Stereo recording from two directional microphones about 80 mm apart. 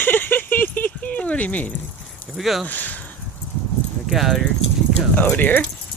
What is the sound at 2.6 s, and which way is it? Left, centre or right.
Speech, left.